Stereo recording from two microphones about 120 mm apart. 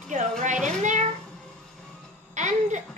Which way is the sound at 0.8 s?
90° right.